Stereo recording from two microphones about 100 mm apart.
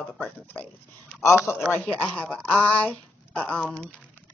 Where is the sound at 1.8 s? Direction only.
10° left (ahead or behind).